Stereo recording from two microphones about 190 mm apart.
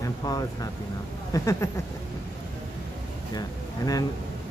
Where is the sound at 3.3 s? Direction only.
20° left (ahead or behind).